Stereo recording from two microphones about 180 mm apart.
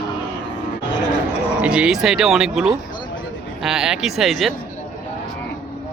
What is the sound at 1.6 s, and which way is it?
Speech, 5° right (ahead or behind).